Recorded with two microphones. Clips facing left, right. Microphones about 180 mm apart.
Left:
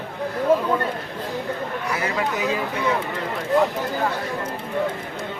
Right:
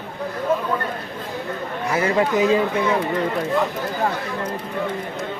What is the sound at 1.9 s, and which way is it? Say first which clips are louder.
Speech: right 8 dB; 30° right (ahead or behind).